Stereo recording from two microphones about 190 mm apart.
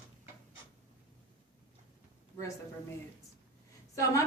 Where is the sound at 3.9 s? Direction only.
15° left (ahead or behind).